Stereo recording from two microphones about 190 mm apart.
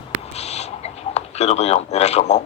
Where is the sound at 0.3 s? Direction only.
35° left (ahead or behind).